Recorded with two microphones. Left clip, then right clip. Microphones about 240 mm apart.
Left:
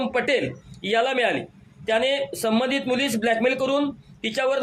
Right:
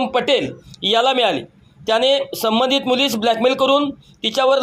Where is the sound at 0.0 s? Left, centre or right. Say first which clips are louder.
Right 5 dB; centre.